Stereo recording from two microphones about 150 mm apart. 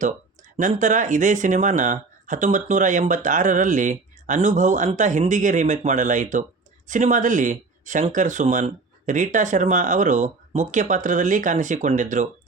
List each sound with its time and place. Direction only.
0.5 s speech: 50° right (ahead or behind)